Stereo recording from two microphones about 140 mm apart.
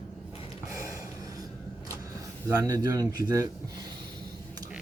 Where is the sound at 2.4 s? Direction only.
25° right (ahead or behind).